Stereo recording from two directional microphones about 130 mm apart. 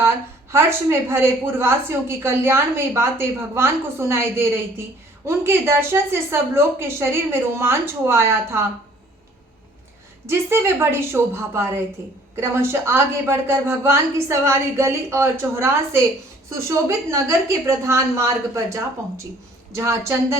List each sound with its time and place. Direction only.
0.0 s a woman's voice: 20° right (ahead or behind)
10.2 s a woman's voice: 20° right (ahead or behind)